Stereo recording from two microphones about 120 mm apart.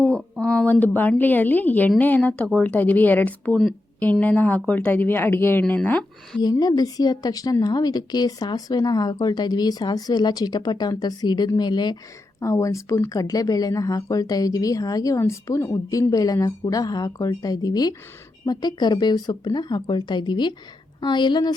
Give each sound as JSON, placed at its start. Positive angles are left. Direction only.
{"t": 0.0, "sound": "a sound", "side_deg": 5}
{"t": 0.9, "sound": "speech", "side_deg": 15}
{"t": 6.4, "sound": "a woman's voice", "side_deg": 35}
{"t": 12.4, "sound": "a woman's voice", "side_deg": 25}